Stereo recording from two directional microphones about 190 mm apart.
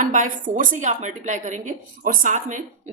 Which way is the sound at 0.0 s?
40° right (ahead or behind).